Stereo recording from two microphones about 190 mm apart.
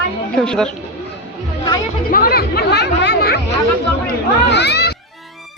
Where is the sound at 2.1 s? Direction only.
50° left (ahead or behind).